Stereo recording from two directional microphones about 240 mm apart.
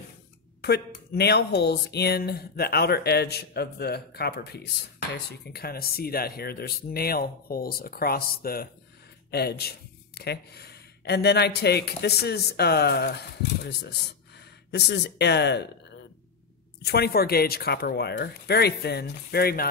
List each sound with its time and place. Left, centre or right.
0.6 s a man's voice: left
16.8 s speech: left